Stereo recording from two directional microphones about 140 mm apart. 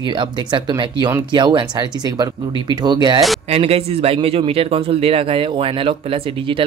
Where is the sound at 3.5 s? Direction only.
45° right (ahead or behind).